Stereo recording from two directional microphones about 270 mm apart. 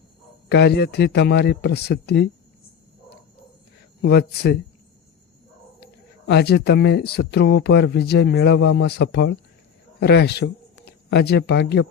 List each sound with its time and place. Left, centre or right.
0.4 s speech: left
4.0 s speech: left
6.2 s speech: left